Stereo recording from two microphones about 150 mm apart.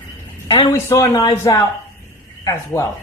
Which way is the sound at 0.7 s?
20° left (ahead or behind).